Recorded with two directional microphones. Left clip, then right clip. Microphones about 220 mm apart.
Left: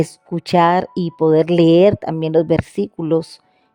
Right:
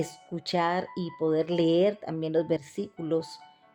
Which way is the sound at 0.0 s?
35° left (ahead or behind).